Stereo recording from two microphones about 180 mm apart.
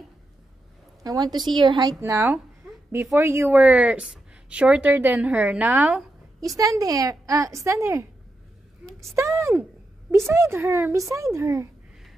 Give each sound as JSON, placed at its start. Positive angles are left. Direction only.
{"t": 1.0, "sound": "a woman's voice", "side_deg": -20}
{"t": 9.1, "sound": "a woman's voice", "side_deg": -15}